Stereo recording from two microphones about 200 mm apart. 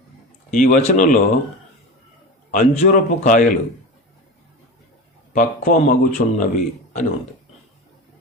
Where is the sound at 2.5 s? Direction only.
40° left (ahead or behind).